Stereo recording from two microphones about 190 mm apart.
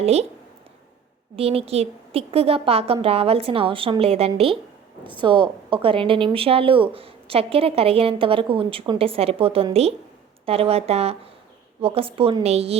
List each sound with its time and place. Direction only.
0.0 s a woman's voice: 35° right (ahead or behind)
1.4 s a woman's voice: 30° right (ahead or behind)